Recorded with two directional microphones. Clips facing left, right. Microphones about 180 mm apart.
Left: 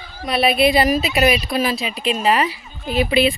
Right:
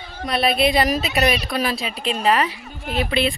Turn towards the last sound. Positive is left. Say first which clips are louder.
# left 4 dB
turn(degrees=5)  # may be behind; listen again after turning